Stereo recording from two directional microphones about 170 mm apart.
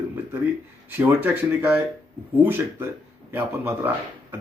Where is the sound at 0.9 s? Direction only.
10° right (ahead or behind).